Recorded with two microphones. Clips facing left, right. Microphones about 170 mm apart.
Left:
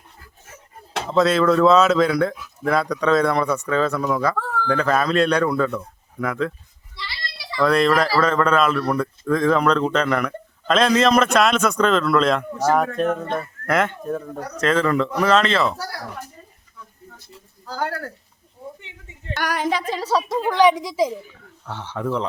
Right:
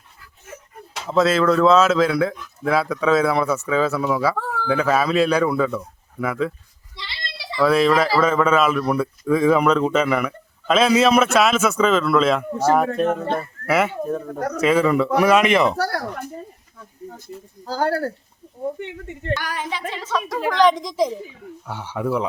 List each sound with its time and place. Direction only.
1.1 s speech: centre (ahead or behind)
6.9 s children playing: 20° right (ahead or behind)
7.6 s speech: 5° right (ahead or behind)
13.1 s a sound: 30° right (ahead or behind)
13.7 s speech: 5° right (ahead or behind)
15.7 s speech: 65° right (ahead or behind)
16.7 s speech: 45° right (ahead or behind)
18.8 s speech: 60° right (ahead or behind)
19.4 s a woman's voice: 70° left (ahead or behind)
19.7 s a woman's voice: 40° left (ahead or behind)
20.5 s a woman's voice: 10° left (ahead or behind)
21.4 s speech: 10° right (ahead or behind)